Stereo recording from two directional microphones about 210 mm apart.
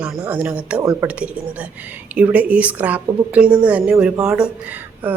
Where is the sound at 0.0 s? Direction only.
5° right (ahead or behind).